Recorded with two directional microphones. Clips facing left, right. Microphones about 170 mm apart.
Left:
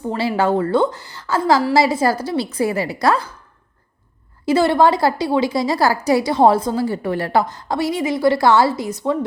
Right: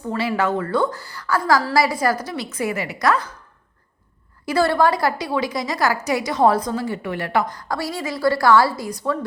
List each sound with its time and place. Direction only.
0.1 s a woman's voice: 30° left (ahead or behind)
4.4 s a woman's voice: 20° left (ahead or behind)